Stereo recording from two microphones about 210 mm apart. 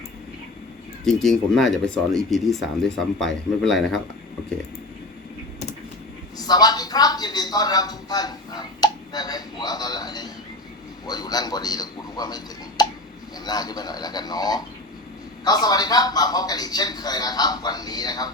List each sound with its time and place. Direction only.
1.0 s speech: centre (ahead or behind)
6.5 s a man's voice: 20° left (ahead or behind)